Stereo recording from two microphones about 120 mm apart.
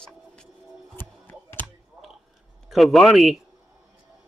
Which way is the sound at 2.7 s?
Centre (ahead or behind).